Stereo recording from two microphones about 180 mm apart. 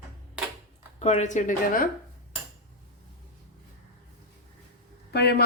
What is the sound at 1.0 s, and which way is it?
Speech, 40° left (ahead or behind).